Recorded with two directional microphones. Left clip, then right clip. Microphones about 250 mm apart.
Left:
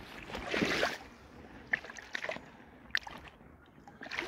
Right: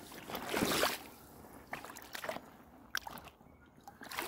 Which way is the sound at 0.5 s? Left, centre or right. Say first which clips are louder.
Left 2 dB; centre.